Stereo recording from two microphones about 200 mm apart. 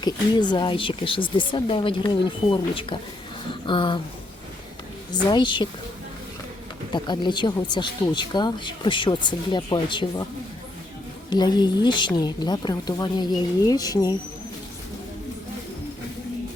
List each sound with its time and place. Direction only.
0.0 s speech: 20° left (ahead or behind)
5.3 s speech: 25° left (ahead or behind)
6.9 s speech: 20° left (ahead or behind)
11.3 s speech: 20° left (ahead or behind)